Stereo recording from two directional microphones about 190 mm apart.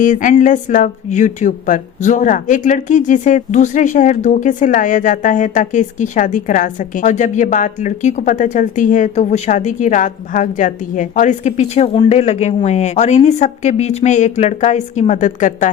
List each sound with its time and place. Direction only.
0.0 s speech: 45° left (ahead or behind)